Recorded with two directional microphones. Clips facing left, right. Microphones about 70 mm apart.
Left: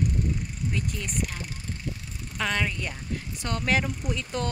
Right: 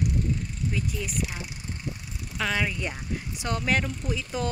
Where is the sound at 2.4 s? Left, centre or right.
Centre.